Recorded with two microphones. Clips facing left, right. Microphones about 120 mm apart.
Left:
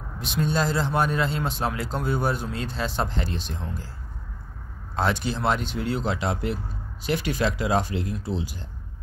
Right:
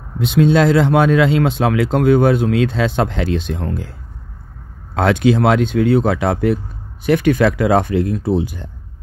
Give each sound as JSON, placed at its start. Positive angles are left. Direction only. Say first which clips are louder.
{"t": 0.4, "sound": "speech", "louder": "right 12 dB", "side_deg": -85}
{"t": 4.9, "sound": "speech", "louder": "right 11 dB", "side_deg": -80}